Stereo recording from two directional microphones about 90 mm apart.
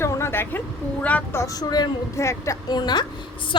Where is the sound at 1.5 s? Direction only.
45° left (ahead or behind).